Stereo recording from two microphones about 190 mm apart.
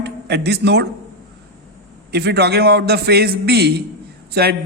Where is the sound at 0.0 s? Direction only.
60° right (ahead or behind).